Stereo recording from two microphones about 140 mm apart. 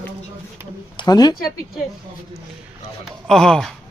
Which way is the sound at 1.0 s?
30° left (ahead or behind).